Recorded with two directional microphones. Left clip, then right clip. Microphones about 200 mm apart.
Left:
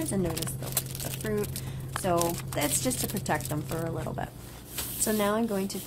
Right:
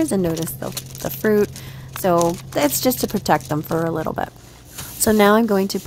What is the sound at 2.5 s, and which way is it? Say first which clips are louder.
A woman's voice: right 12 dB; 40° right (ahead or behind).